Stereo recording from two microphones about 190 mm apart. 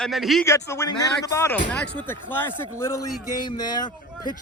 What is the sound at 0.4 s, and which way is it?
Speech, 15° left (ahead or behind).